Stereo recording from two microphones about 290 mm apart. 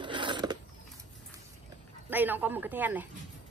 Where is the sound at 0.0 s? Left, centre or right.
Centre.